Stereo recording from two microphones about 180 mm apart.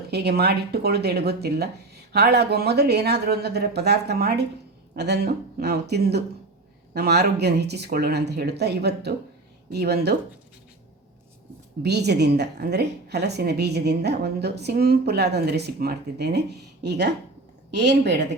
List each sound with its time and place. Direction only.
0.1 s a woman's voice: 65° right (ahead or behind)
11.8 s a woman's voice: 65° right (ahead or behind)